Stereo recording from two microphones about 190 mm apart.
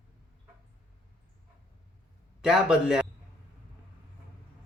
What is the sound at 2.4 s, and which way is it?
Speech, 5° right (ahead or behind).